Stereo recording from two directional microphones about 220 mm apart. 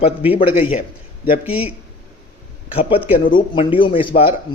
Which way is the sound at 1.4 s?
5° right (ahead or behind).